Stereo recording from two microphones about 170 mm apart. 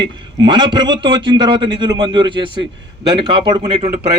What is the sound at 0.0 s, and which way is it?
A man's voice, 25° right (ahead or behind).